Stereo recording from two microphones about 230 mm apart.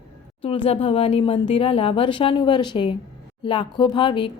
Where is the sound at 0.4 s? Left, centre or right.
Left.